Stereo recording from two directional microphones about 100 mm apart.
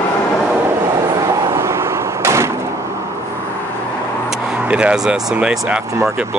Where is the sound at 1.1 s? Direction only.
40° right (ahead or behind).